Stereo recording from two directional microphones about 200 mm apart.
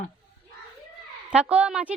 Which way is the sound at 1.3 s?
5° right (ahead or behind).